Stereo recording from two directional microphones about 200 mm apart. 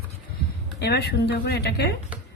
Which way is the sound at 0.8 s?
55° left (ahead or behind).